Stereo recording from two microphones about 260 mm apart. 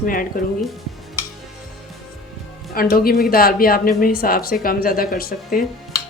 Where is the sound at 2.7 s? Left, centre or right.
Left.